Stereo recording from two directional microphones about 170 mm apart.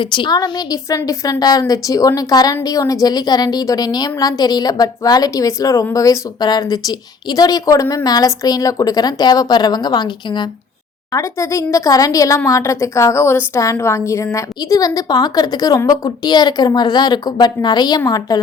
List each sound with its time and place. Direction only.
0.0 s a woman's voice: 30° left (ahead or behind)